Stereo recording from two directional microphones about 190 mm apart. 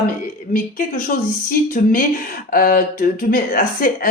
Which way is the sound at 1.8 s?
40° left (ahead or behind).